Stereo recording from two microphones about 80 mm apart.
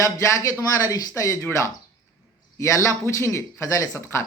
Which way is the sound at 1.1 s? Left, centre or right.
Left.